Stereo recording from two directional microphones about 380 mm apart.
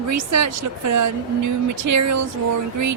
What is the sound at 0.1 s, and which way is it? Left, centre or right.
Speech, right.